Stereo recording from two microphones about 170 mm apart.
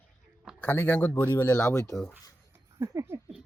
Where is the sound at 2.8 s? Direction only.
15° right (ahead or behind).